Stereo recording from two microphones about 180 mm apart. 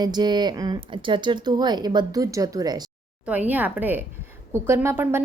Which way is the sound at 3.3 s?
10° right (ahead or behind).